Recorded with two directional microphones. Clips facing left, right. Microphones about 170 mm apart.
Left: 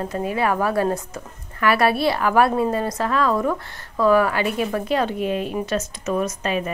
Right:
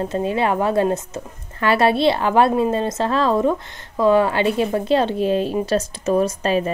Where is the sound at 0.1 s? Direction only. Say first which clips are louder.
Right 1 dB; 25° right (ahead or behind).